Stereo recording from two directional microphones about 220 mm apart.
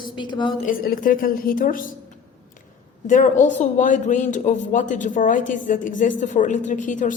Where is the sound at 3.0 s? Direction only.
35° left (ahead or behind).